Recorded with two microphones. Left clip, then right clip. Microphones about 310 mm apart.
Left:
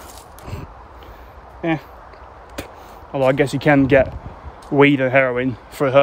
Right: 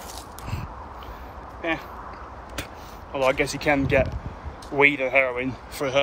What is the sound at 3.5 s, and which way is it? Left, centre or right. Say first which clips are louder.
Speech: left 7 dB; left.